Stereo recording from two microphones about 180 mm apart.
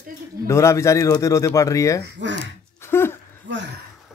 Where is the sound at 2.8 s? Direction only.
15° left (ahead or behind).